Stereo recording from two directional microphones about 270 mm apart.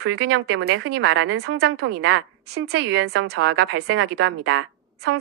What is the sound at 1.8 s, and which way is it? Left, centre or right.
A woman's voice, right.